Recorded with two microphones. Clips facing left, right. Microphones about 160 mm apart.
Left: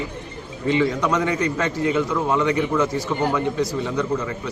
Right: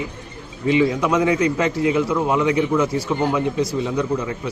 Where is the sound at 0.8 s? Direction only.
10° right (ahead or behind).